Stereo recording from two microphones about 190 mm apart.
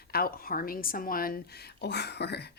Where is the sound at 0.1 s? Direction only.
50° left (ahead or behind).